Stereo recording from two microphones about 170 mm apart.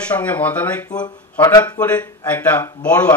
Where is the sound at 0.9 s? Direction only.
25° left (ahead or behind).